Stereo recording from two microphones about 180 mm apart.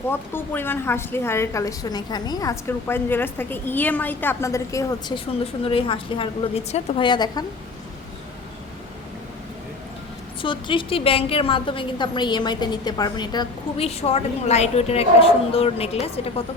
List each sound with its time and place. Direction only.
0.1 s a woman's voice: 10° left (ahead or behind)
10.4 s a woman's voice: 30° left (ahead or behind)